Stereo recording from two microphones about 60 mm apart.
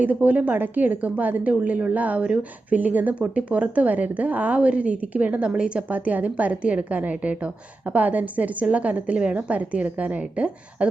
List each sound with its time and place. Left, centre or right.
0.0 s a woman's voice: right